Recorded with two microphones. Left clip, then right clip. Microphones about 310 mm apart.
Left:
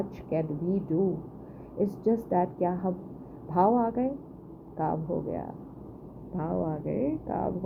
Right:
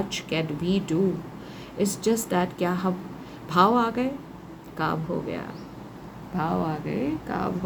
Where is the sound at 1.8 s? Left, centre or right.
Centre.